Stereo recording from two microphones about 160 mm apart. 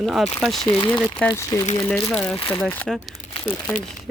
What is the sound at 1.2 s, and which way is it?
Speech, 20° left (ahead or behind).